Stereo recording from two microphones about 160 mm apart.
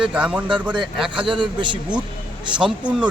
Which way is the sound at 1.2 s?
30° right (ahead or behind).